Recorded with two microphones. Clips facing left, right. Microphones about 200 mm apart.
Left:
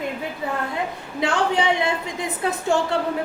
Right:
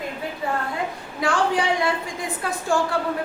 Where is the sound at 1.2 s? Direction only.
20° left (ahead or behind).